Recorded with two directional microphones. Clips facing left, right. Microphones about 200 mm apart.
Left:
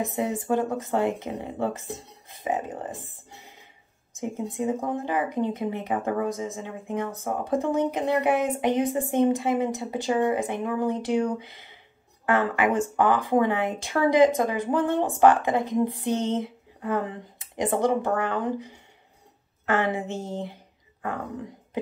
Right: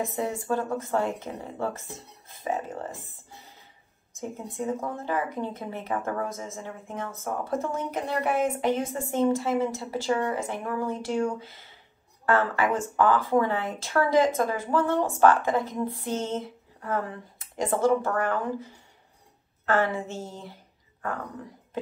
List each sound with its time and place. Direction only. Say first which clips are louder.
0.1 s speech: left 3 dB; 20° left (ahead or behind)
4.2 s a woman's voice: left 4 dB; 15° left (ahead or behind)